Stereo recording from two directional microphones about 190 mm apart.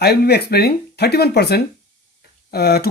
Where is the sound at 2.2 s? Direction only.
55° left (ahead or behind).